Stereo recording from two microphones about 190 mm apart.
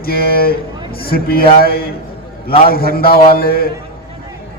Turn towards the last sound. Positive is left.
turn(degrees=50)  # may be behind; listen again after turning